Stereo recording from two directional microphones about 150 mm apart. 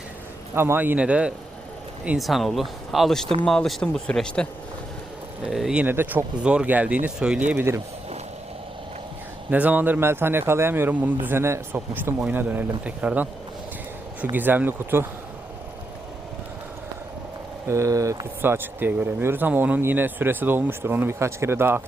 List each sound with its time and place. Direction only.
0.5 s speech: 15° right (ahead or behind); by 4.4 s 5° left (ahead or behind)
5.5 s speech: centre (ahead or behind)
9.5 s speech: 10° right (ahead or behind)
14.3 s speech: 10° right (ahead or behind)
17.7 s speech: 20° right (ahead or behind)